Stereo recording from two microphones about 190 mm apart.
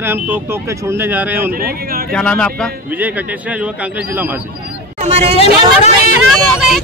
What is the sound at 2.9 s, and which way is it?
Speech, 10° right (ahead or behind).